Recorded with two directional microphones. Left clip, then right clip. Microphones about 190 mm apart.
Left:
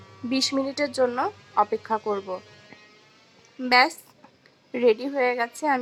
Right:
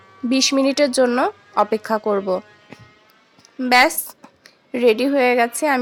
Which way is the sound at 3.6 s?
10° right (ahead or behind).